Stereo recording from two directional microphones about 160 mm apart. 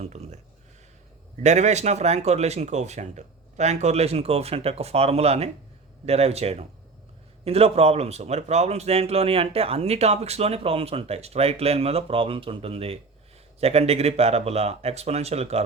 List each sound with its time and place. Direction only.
0.0 s speech: 45° right (ahead or behind)
1.4 s speech: 45° right (ahead or behind)